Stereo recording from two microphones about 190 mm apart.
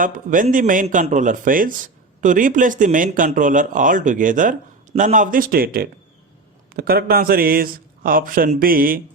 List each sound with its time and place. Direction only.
0.0 s a man's voice: 45° right (ahead or behind)